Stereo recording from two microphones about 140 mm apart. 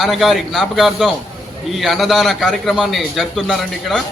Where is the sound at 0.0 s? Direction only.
Centre (ahead or behind).